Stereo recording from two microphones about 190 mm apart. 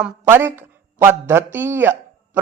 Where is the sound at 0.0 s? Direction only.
10° right (ahead or behind).